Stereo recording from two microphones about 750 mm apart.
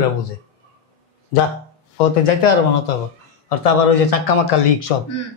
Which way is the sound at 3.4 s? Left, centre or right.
Left.